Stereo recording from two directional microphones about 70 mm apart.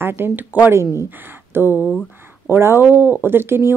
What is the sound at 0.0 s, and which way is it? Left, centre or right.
A woman's voice, right.